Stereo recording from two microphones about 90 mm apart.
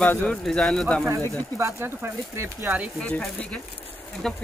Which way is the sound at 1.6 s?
35° right (ahead or behind).